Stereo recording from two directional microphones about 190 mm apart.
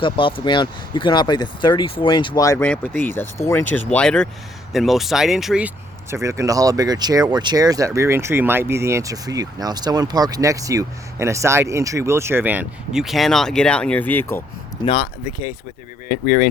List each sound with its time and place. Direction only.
0.0 s speech: 25° left (ahead or behind); by 14.4 s 10° left (ahead or behind)
14.8 s speech: 25° left (ahead or behind)
16.1 s speech: 50° left (ahead or behind)